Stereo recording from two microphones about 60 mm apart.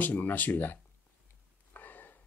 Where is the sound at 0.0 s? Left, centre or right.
Left.